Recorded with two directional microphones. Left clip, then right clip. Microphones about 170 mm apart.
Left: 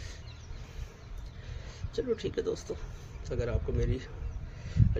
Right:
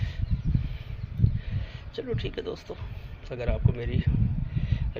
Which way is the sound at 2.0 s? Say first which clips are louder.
Left 1 dB; 20° left (ahead or behind).